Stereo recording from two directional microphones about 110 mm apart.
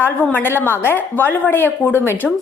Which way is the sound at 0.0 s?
20° left (ahead or behind).